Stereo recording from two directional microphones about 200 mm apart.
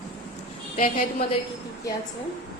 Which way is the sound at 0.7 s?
40° left (ahead or behind).